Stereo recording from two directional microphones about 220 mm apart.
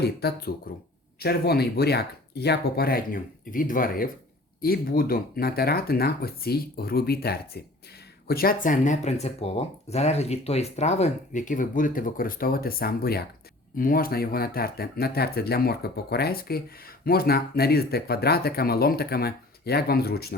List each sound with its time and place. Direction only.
0.0 s speech: 45° left (ahead or behind)